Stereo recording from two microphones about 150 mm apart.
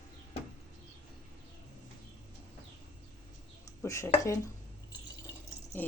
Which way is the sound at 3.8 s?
20° left (ahead or behind).